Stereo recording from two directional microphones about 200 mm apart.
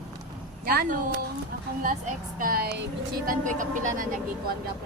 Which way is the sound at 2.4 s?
45° right (ahead or behind).